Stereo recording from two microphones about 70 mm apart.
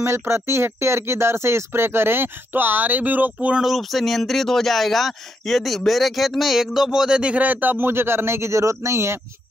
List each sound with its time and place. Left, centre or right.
0.0 s speech: right; by 3.6 s centre
3.6 s speech: centre; by 9.2 s right